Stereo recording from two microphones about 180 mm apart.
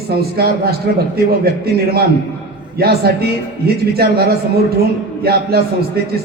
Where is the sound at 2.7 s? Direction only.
60° right (ahead or behind).